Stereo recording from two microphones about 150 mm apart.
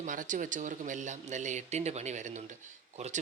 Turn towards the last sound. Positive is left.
turn(degrees=-50)  # may be behind; listen again after turning